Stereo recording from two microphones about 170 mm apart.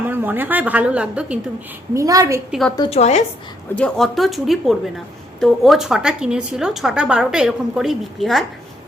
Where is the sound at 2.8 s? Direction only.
40° left (ahead or behind).